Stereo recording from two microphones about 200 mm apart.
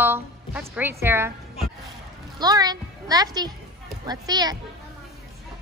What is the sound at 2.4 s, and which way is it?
A woman's voice, 20° right (ahead or behind).